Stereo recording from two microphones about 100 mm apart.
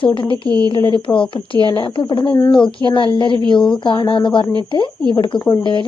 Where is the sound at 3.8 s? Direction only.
55° left (ahead or behind).